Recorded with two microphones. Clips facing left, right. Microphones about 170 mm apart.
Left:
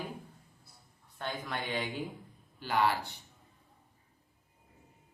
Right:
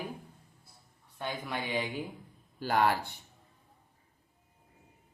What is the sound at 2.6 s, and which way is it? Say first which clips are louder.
Speech: right 2 dB; 45° right (ahead or behind).